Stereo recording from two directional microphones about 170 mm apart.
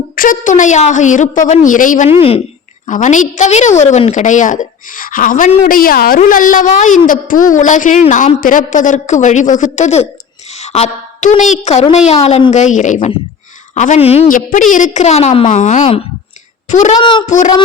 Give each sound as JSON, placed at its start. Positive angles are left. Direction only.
{"t": 0.2, "sound": "a woman's voice", "side_deg": 50}
{"t": 14.3, "sound": "a woman's voice", "side_deg": 50}
{"t": 17.0, "sound": "a child's voice", "side_deg": 25}
{"t": 17.2, "sound": "a woman's voice", "side_deg": 45}